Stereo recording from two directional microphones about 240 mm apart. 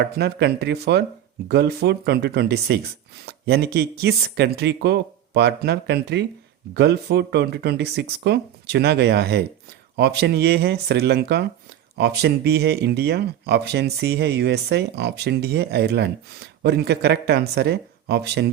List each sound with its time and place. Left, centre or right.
0.0 s speech: right